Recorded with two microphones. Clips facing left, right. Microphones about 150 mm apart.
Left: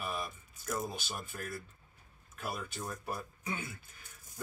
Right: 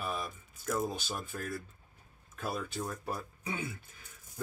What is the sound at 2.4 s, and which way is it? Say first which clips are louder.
Speech: right 3 dB; 30° right (ahead or behind).